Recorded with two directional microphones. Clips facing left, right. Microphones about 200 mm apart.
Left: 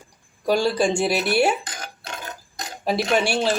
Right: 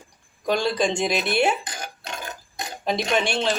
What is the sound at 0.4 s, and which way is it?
Speech, 10° left (ahead or behind).